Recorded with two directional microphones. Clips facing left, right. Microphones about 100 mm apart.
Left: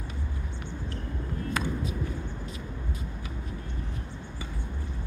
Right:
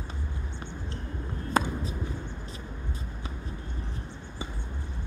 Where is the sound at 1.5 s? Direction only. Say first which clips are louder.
Right 4 dB; 35° right (ahead or behind).